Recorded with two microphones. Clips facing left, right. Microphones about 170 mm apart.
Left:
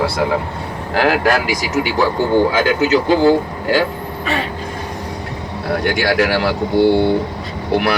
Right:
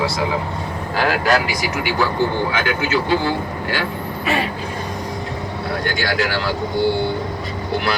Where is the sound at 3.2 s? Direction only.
40° left (ahead or behind).